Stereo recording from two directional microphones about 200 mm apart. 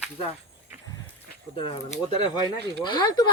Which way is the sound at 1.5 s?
25° left (ahead or behind).